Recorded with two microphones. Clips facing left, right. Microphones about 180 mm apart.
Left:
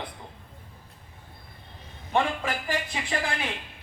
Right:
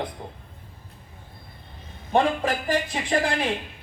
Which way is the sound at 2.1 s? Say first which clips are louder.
Right 5 dB; 40° right (ahead or behind).